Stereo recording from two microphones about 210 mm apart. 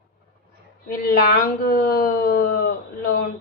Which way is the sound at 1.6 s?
45° left (ahead or behind).